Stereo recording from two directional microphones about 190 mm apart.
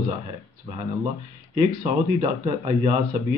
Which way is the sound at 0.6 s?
25° right (ahead or behind).